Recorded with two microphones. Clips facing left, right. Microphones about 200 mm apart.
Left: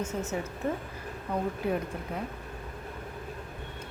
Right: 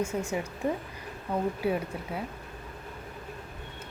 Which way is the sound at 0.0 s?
10° right (ahead or behind).